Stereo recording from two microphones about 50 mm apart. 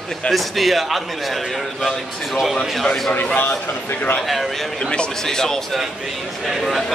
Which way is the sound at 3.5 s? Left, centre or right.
Left.